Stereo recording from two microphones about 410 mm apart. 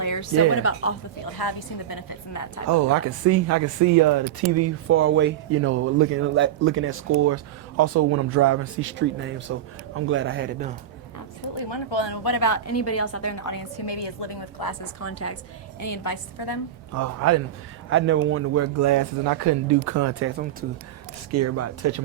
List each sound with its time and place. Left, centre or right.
0.0 s a woman's voice: left
1.2 s a woman's voice: left
2.6 s speech: right
4.5 s speech: right
11.7 s a woman's voice: left
15.0 s a woman's voice: left
15.8 s a woman's voice: left
16.9 s speech: right
17.8 s speech: right
21.2 s speech: right